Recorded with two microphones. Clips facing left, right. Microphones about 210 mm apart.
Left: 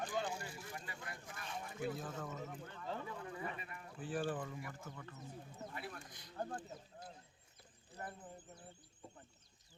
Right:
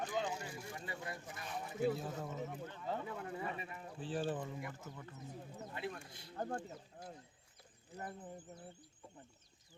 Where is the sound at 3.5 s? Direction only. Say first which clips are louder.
Right 3 dB; 25° right (ahead or behind).